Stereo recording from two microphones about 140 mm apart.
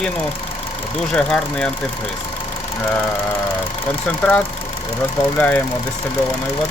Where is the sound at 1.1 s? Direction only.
5° left (ahead or behind).